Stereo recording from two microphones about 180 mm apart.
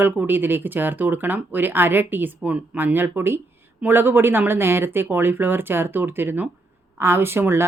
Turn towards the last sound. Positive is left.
turn(degrees=-15)  # may be behind; listen again after turning